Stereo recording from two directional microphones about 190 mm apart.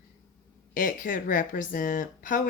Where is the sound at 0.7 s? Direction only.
45° left (ahead or behind).